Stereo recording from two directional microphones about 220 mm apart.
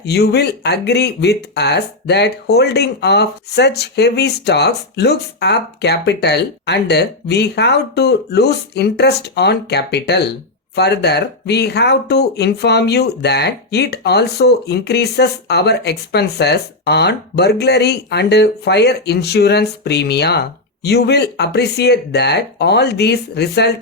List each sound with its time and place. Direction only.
0.0 s speech: 50° left (ahead or behind)